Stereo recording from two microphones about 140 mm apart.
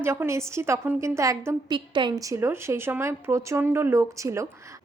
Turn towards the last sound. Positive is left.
turn(degrees=-20)  # may be behind; listen again after turning